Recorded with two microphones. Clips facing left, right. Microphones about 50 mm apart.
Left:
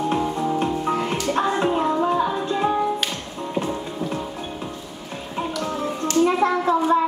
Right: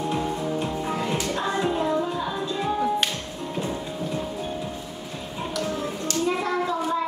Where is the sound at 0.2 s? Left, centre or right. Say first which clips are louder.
Left 4 dB; left.